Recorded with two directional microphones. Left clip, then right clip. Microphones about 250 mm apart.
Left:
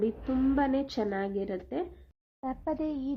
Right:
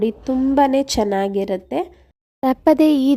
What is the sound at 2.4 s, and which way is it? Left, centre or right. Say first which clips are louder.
Speech: right 19 dB; right.